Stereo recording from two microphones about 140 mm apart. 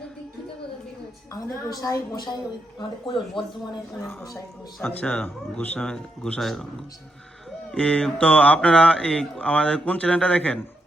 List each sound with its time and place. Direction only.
1.3 s a woman's voice: 25° left (ahead or behind)
4.8 s speech: 10° left (ahead or behind)
7.7 s speech: 5° left (ahead or behind)